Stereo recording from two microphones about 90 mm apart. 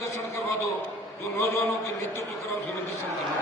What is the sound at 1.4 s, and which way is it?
Speech, 30° left (ahead or behind).